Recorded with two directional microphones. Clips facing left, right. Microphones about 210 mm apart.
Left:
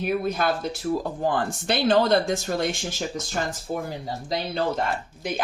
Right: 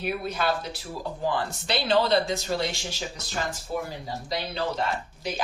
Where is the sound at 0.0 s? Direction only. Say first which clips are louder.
Left 4 dB; 45° left (ahead or behind).